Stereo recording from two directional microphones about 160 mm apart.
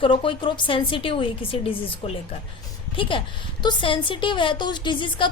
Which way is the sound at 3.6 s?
30° left (ahead or behind).